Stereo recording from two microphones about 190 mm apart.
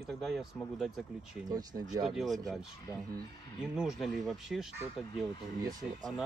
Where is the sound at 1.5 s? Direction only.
20° right (ahead or behind).